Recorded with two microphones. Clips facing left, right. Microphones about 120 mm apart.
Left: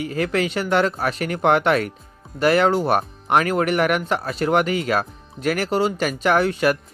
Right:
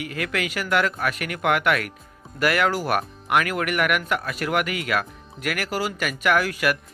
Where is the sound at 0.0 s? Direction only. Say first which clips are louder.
Left 6 dB; 30° left (ahead or behind).